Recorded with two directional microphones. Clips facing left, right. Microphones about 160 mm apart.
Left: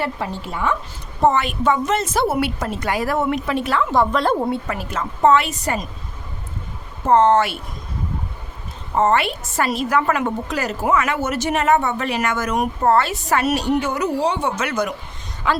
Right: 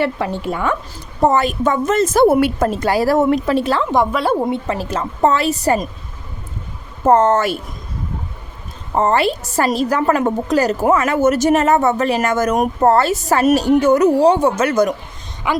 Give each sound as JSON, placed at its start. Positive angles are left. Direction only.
{"t": 0.0, "sound": "a woman's voice", "side_deg": -65}
{"t": 1.2, "sound": "a woman's voice", "side_deg": -40}
{"t": 2.8, "sound": "a woman's voice", "side_deg": -35}
{"t": 3.9, "sound": "a woman's voice", "side_deg": -10}
{"t": 7.0, "sound": "speech", "side_deg": -45}
{"t": 9.0, "sound": "a woman's voice", "side_deg": -35}
{"t": 15.4, "sound": "speech", "side_deg": -15}